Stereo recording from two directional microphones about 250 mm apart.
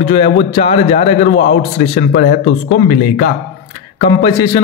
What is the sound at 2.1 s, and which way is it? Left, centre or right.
Speech, left.